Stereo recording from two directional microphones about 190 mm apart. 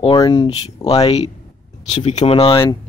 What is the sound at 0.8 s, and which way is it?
Speech, 30° left (ahead or behind).